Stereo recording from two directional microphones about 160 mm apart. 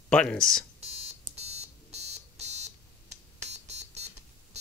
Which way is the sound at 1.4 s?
40° right (ahead or behind).